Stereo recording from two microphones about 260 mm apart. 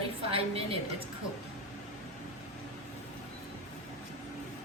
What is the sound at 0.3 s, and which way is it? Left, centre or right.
Speech, right.